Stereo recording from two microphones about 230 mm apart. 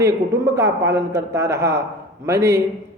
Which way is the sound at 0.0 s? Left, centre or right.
Centre.